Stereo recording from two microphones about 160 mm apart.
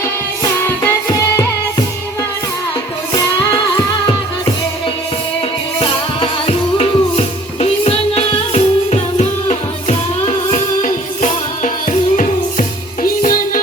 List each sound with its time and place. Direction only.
0.9 s music: 20° left (ahead or behind)
6.1 s music: 40° left (ahead or behind); by 13.6 s 60° left (ahead or behind)